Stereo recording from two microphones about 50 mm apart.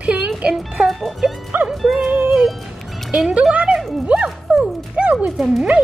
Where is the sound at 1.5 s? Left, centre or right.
Right.